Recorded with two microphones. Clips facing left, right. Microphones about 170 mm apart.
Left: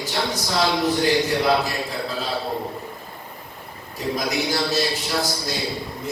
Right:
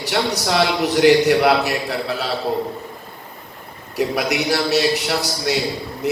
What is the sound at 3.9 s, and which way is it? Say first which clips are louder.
A man's voice: right 4 dB; 70° right (ahead or behind).